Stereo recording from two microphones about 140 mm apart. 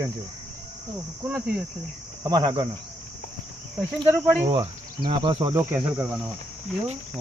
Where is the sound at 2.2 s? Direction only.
30° right (ahead or behind).